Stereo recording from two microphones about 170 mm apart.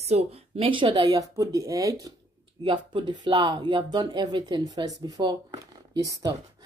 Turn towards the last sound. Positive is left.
turn(degrees=-20)  # may be behind; listen again after turning